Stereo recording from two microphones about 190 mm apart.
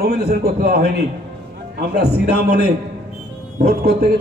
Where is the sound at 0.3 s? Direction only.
50° right (ahead or behind).